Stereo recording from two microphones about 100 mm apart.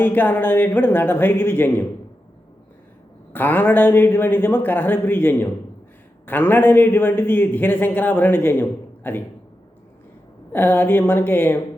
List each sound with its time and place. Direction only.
0.0 s a man's voice: 20° left (ahead or behind)
3.3 s a man's voice: 20° left (ahead or behind)
10.5 s a man's voice: 20° left (ahead or behind)